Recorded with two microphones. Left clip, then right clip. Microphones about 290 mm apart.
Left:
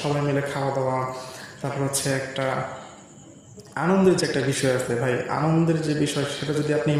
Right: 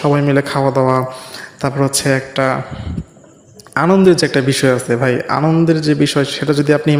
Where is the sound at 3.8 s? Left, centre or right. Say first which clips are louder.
Right 9 dB; right.